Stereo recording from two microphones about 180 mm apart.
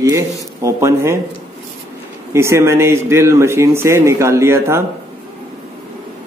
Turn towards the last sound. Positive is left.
turn(degrees=-15)  # may be behind; listen again after turning